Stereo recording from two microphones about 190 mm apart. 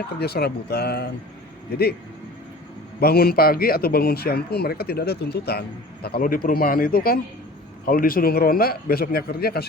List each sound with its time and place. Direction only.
0.2 s speech: 55° left (ahead or behind)
3.0 s speech: 55° left (ahead or behind)